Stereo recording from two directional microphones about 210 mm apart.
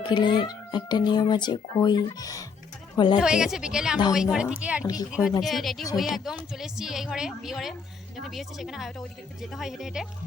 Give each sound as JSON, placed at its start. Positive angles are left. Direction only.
{"t": 0.0, "sound": "speech", "side_deg": 20}
{"t": 3.2, "sound": "a woman's voice", "side_deg": -5}